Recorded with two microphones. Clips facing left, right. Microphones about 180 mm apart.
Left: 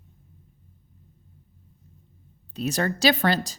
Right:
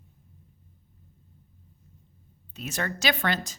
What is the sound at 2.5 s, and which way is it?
A woman's voice, 35° left (ahead or behind).